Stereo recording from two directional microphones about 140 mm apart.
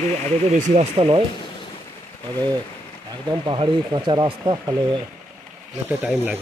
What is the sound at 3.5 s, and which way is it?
Speech, 35° right (ahead or behind).